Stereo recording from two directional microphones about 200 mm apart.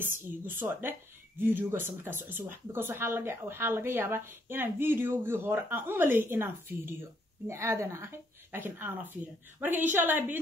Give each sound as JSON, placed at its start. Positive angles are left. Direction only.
{"t": 0.0, "sound": "speech", "side_deg": -10}